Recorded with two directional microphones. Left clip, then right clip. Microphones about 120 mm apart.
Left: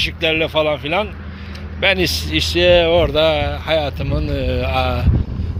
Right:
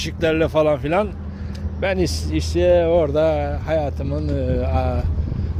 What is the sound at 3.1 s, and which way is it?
Speech, 30° right (ahead or behind).